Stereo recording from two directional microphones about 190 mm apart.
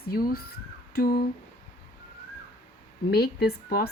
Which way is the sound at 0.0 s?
50° left (ahead or behind).